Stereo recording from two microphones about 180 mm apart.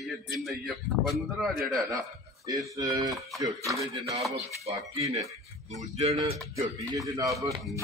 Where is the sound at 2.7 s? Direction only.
20° right (ahead or behind).